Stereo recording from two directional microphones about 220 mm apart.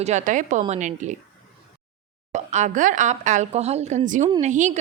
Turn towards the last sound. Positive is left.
turn(degrees=-35)  # may be behind; listen again after turning